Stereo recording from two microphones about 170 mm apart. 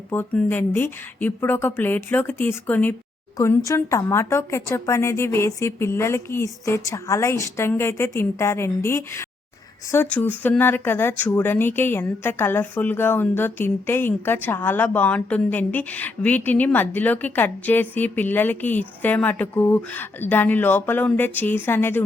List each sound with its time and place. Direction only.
0.1 s speech: 15° left (ahead or behind)